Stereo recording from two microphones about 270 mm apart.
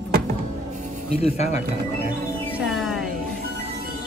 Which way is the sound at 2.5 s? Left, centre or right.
Centre.